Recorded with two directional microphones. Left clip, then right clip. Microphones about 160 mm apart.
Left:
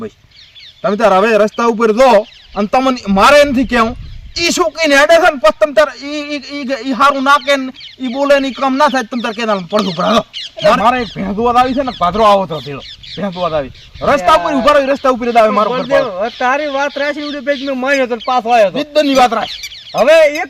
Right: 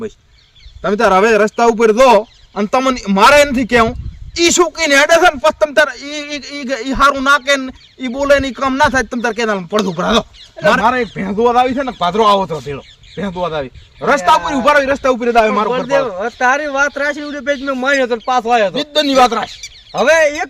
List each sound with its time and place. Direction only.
0.8 s speech: 30° right (ahead or behind)
11.9 s speech: 30° right (ahead or behind)
15.9 s speech: 10° right (ahead or behind)
18.7 s speech: 35° right (ahead or behind)
20.0 s speech: 15° right (ahead or behind)